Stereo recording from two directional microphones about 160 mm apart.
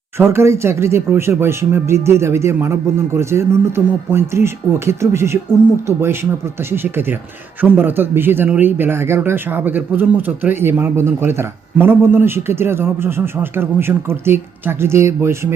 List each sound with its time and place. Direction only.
0.2 s a man's voice: 15° right (ahead or behind)
6.7 s a man's voice: 15° right (ahead or behind)